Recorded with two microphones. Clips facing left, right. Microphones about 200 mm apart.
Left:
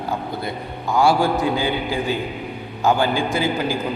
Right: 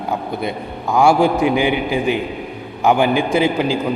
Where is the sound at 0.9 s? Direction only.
20° right (ahead or behind).